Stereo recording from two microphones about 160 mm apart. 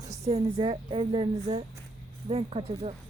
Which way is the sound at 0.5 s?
35° right (ahead or behind).